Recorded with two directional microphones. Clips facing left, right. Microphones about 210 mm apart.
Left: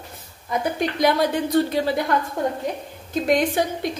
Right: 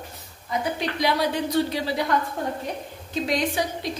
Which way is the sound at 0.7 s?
50° left (ahead or behind).